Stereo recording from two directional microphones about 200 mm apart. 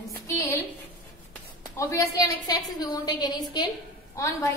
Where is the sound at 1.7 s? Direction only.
15° left (ahead or behind).